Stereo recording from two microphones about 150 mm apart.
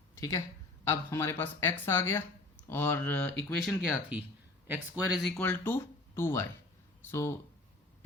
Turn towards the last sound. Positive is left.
turn(degrees=15)  # may be behind; listen again after turning